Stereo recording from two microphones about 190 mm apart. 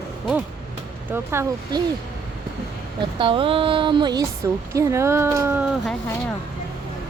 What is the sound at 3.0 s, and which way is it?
Speech, 25° right (ahead or behind).